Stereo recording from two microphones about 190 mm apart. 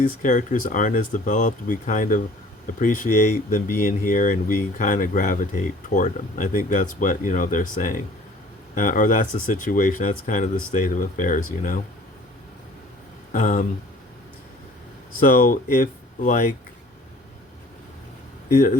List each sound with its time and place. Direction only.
0.0 s speech: 45° left (ahead or behind)
13.3 s speech: 40° left (ahead or behind)
15.2 s speech: 45° left (ahead or behind)